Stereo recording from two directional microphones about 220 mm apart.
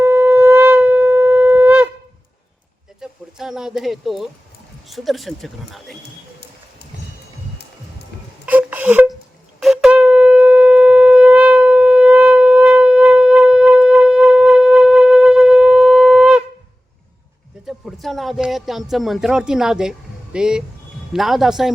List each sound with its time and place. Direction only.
0.0 s shofar: 10° right (ahead or behind)
3.0 s speech: centre (ahead or behind)
8.1 s a sound: 50° left (ahead or behind)
8.4 s a sound: 5° right (ahead or behind)
9.6 s shofar: centre (ahead or behind)
17.7 s speech: centre (ahead or behind)